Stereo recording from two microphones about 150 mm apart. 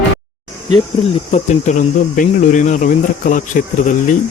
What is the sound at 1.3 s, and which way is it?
Speech, 55° left (ahead or behind).